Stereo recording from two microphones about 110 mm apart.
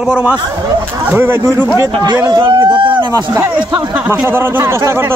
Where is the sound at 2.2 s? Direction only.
40° right (ahead or behind).